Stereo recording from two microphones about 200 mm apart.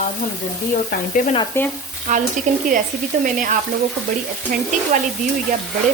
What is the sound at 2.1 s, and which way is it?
Speech, 40° right (ahead or behind).